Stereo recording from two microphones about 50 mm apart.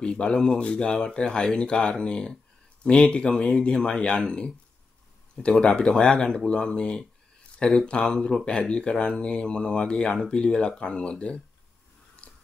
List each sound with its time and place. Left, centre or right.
0.0 s speech: centre